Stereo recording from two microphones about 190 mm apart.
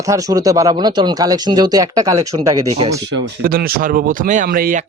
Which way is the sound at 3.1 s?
50° right (ahead or behind).